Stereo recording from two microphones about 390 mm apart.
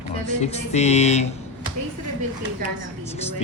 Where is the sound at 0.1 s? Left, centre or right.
Centre.